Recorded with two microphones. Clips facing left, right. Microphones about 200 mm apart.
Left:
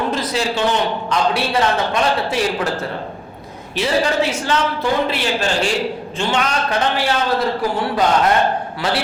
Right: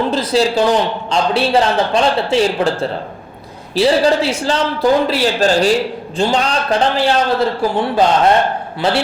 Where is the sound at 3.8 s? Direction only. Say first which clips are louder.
Right 5 dB; 35° right (ahead or behind).